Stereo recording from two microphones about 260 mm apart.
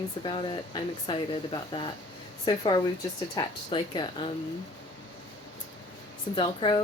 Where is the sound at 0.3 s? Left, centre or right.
Centre.